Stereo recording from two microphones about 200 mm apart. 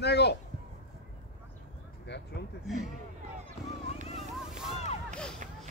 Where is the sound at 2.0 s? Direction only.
60° left (ahead or behind).